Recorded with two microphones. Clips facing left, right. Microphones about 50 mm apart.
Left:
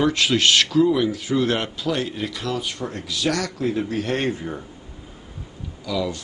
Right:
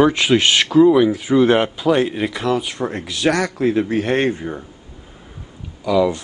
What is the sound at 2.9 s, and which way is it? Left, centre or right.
A man's voice, right.